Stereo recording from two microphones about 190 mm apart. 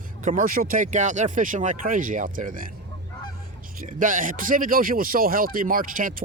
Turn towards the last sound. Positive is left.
turn(degrees=-45)  # may be behind; listen again after turning